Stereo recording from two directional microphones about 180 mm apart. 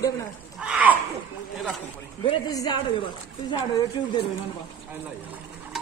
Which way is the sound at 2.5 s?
20° left (ahead or behind).